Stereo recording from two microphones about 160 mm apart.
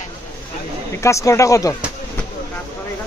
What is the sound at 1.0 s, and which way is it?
Speech, 20° left (ahead or behind).